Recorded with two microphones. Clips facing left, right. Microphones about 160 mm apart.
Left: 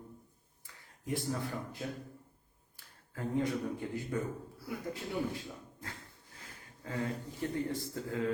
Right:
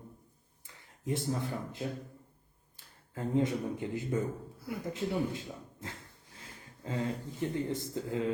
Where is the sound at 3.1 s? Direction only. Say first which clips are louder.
Right 3 dB; 20° right (ahead or behind).